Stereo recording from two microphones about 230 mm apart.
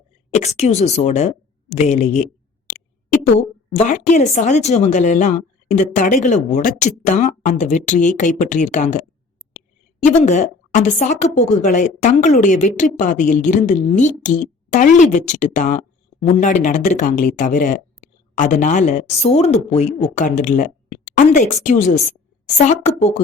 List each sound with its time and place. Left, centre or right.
0.3 s a woman's voice: left
10.1 s a woman's voice: left